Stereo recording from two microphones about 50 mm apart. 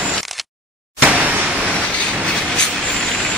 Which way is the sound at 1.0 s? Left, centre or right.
Right.